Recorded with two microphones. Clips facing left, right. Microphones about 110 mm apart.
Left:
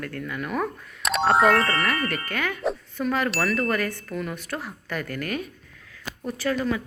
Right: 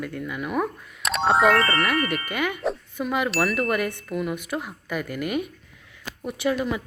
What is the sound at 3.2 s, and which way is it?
Speech, centre (ahead or behind).